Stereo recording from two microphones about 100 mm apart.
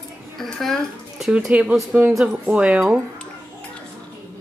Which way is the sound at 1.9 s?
20° right (ahead or behind).